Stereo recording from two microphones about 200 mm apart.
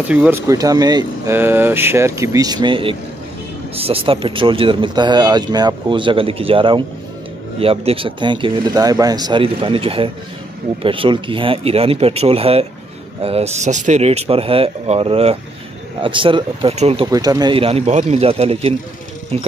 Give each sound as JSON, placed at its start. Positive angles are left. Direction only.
{"t": 0.1, "sound": "speech", "side_deg": -10}
{"t": 17.1, "sound": "speech", "side_deg": -20}